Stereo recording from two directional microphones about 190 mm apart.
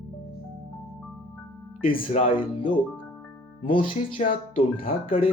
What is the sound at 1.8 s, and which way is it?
Speech, 50° left (ahead or behind).